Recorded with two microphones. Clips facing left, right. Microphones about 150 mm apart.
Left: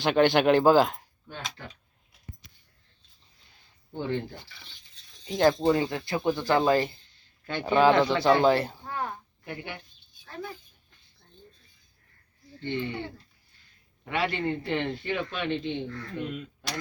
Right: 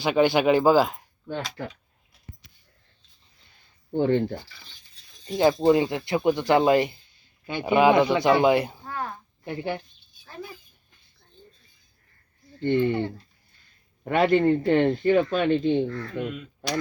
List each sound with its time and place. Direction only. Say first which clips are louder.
0.0 s speech: right 1 dB; 10° right (ahead or behind)
3.9 s speech: right 9 dB; 55° right (ahead or behind)
5.2 s speech: right 3 dB; 5° right (ahead or behind)
9.4 s speech: right 10 dB; 30° right (ahead or behind)
10.2 s speech: left 1 dB; 5° right (ahead or behind)
12.6 s speech: right 9 dB; 50° right (ahead or behind)